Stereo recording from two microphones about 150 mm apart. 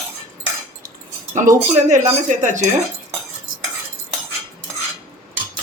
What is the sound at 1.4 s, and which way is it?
Speech, 55° right (ahead or behind).